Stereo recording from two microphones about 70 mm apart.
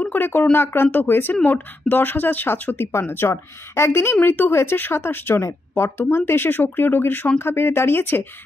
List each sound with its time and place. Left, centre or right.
0.0 s a woman's voice: left